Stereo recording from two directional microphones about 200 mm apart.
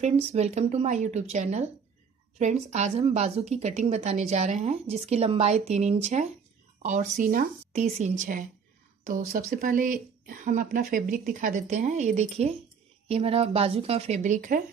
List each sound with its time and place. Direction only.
0.0 s a woman's voice: 35° right (ahead or behind)